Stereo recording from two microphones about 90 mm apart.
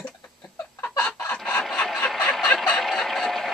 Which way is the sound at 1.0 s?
30° left (ahead or behind).